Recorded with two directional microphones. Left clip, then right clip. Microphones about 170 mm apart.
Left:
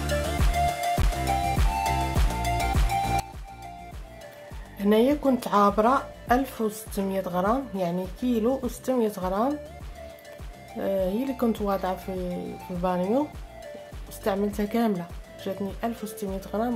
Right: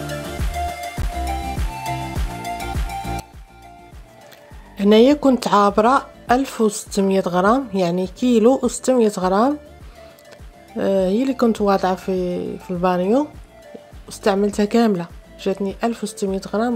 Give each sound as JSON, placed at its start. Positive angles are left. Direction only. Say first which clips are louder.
{"t": 0.0, "sound": "music", "louder": "even", "side_deg": 0}
{"t": 4.7, "sound": "speech", "louder": "right 9 dB", "side_deg": -45}
{"t": 10.8, "sound": "speech", "louder": "right 8 dB", "side_deg": -35}